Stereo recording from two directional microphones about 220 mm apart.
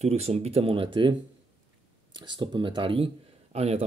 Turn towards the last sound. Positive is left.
turn(degrees=-30)  # may be behind; listen again after turning